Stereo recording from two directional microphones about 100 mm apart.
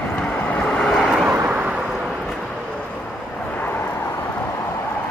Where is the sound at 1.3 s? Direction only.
20° right (ahead or behind).